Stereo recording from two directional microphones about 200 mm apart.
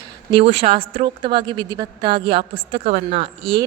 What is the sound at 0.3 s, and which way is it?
A woman's voice, 25° right (ahead or behind).